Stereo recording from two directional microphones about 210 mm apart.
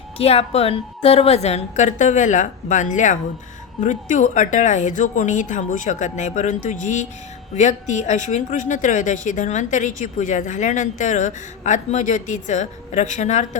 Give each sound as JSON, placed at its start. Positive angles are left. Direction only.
{"t": 0.2, "sound": "speech", "side_deg": 30}